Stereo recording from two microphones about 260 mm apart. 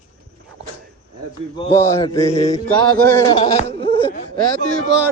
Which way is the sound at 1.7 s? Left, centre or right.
Centre.